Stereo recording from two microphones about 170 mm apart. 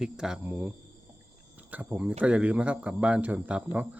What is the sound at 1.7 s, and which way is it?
Speech, 10° right (ahead or behind).